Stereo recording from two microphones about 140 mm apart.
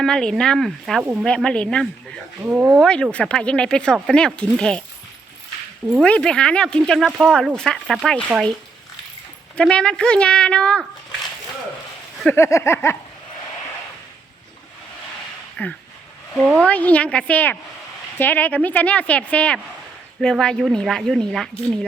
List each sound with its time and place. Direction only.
0.0 s speech: 5° left (ahead or behind)
2.4 s speech: 10° right (ahead or behind)
6.0 s speech: 5° left (ahead or behind)
9.6 s speech: 5° left (ahead or behind)
12.4 s a sound: 20° left (ahead or behind)
15.6 s speech: 10° left (ahead or behind)
16.4 s speech: centre (ahead or behind)
16.6 s speech: 10° left (ahead or behind)